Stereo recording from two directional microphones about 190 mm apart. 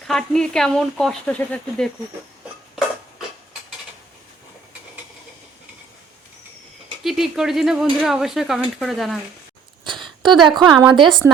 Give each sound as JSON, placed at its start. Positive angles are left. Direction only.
{"t": 0.1, "sound": "speech", "side_deg": 5}
{"t": 7.0, "sound": "speech", "side_deg": 0}
{"t": 9.8, "sound": "a sound", "side_deg": -25}
{"t": 10.6, "sound": "a woman's voice", "side_deg": -20}